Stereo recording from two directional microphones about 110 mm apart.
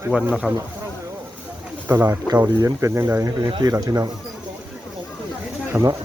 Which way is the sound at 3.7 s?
35° right (ahead or behind).